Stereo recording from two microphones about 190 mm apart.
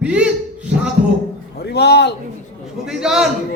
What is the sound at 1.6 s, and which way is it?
Speech, 60° left (ahead or behind).